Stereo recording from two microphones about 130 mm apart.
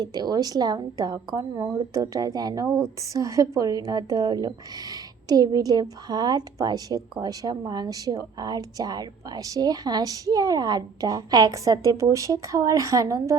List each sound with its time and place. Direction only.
0.0 s a woman's voice: 30° right (ahead or behind)